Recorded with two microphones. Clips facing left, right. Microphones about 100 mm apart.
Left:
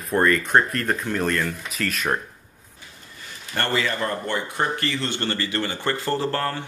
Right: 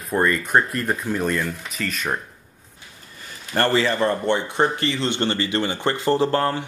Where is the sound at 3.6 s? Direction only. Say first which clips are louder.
Right 5 dB; 30° right (ahead or behind).